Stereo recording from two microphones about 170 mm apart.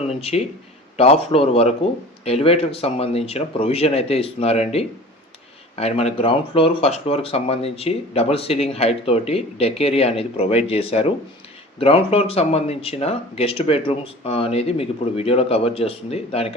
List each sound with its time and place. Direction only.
0.2 s speech: 35° left (ahead or behind)